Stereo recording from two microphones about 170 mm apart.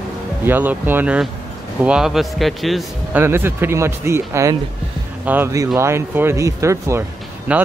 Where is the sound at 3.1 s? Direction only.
15° right (ahead or behind).